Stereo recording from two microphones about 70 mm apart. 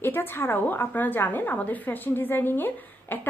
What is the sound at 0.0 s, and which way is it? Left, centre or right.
A woman's voice, left.